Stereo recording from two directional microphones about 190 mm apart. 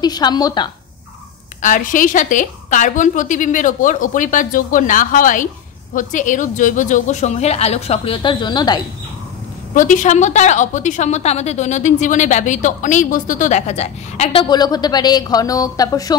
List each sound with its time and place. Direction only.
0.0 s a woman's voice: 20° left (ahead or behind)
1.6 s a woman's voice: 45° left (ahead or behind); by 8.8 s 20° left (ahead or behind)
9.8 s a woman's voice: 40° left (ahead or behind); by 16.2 s 20° left (ahead or behind)